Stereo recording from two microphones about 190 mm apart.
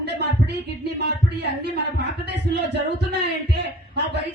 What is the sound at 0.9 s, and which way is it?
Speech, 60° right (ahead or behind).